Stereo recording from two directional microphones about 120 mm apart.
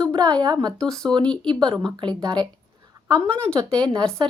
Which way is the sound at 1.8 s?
40° right (ahead or behind).